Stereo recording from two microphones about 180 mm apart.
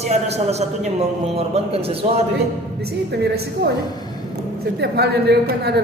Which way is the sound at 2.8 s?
65° right (ahead or behind).